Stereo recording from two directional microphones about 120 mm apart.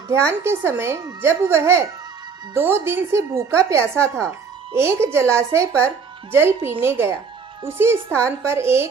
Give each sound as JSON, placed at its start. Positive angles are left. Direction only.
{"t": 0.4, "sound": "a woman's voice", "side_deg": -20}